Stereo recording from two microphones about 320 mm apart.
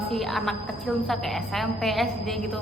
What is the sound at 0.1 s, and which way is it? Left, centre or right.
A woman's voice, centre.